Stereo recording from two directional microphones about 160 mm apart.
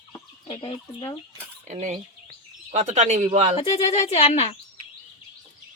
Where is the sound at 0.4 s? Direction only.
35° left (ahead or behind).